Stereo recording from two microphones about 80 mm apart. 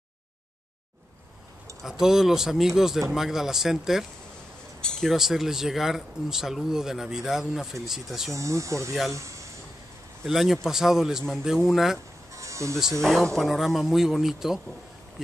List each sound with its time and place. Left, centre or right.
1.8 s speech: centre
5.1 s speech: centre
8.3 s speech: right
10.2 s speech: centre
12.4 s music: right
13.0 s speech: centre